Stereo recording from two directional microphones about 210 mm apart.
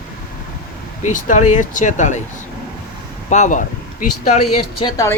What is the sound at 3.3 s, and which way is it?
Speech, 35° left (ahead or behind).